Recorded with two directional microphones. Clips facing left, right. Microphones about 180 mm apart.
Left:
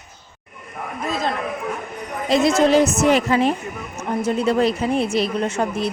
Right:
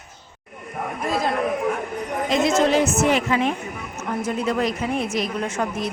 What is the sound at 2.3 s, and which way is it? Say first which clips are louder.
Speech: left 4 dB; 35° left (ahead or behind).